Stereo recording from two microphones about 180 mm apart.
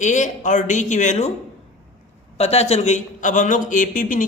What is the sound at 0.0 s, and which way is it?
A man's voice, 45° left (ahead or behind).